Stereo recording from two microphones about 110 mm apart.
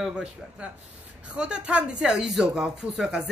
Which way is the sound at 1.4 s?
10° right (ahead or behind).